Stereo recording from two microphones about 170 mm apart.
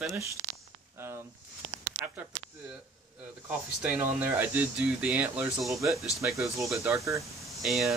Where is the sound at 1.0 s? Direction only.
15° right (ahead or behind).